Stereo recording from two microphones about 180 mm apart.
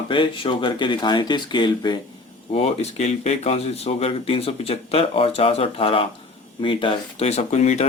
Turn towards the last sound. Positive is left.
turn(degrees=40)  # may be behind; listen again after turning